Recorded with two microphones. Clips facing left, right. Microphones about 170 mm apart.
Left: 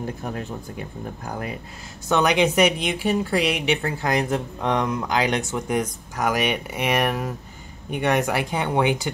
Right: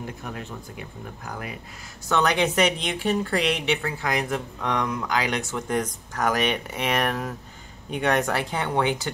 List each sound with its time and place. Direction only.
0.0 s speech: 35° left (ahead or behind)
2.0 s speech: 15° left (ahead or behind)
3.8 s speech: 30° left (ahead or behind); by 9.1 s 15° left (ahead or behind)